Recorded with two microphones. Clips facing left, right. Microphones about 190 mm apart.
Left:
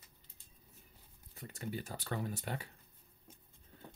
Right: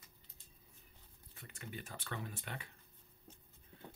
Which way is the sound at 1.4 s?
35° left (ahead or behind).